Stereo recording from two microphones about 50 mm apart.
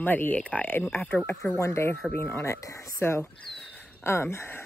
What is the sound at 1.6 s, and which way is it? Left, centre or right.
Speech, left.